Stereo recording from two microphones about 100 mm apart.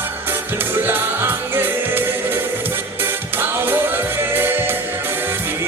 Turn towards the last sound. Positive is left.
turn(degrees=-20)  # may be behind; listen again after turning